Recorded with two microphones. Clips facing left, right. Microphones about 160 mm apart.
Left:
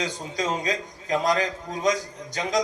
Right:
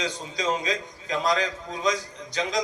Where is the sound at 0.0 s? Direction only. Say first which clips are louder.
Left 1 dB; 45° left (ahead or behind).